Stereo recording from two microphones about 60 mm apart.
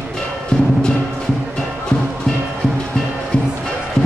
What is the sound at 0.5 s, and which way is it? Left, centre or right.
Music, centre.